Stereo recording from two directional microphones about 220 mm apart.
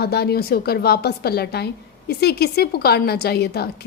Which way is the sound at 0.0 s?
45° left (ahead or behind).